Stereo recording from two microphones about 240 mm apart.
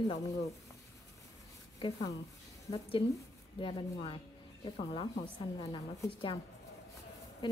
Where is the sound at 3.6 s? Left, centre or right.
Left.